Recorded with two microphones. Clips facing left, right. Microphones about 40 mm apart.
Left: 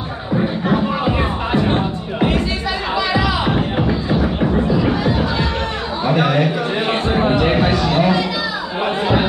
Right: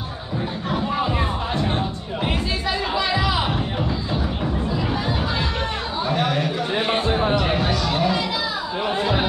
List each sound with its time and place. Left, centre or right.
0.7 s music: left
3.4 s music: left
6.0 s speech: left
7.2 s chatter: left